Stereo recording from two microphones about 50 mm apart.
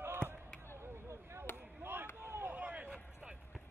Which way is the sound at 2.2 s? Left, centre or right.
Right.